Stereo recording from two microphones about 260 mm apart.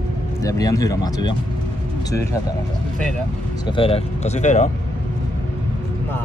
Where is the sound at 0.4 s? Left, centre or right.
Centre.